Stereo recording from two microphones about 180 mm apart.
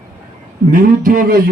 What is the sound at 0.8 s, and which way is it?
Speech, 50° right (ahead or behind).